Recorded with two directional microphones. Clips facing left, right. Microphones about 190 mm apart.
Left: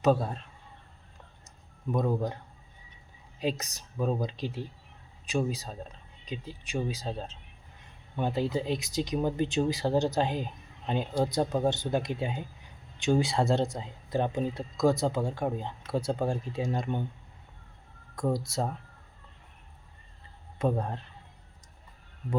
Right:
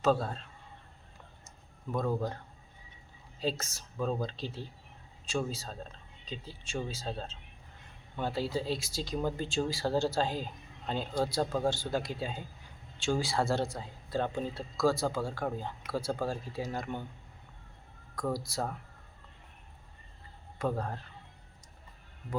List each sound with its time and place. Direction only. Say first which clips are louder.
0.0 s speech: left 3 dB; 15° left (ahead or behind)
1.9 s speech: left 3 dB; 20° left (ahead or behind)
3.4 s speech: left 3 dB; 15° left (ahead or behind)
18.1 s speech: left 4 dB; 25° left (ahead or behind)
20.6 s speech: left 4 dB; 25° left (ahead or behind)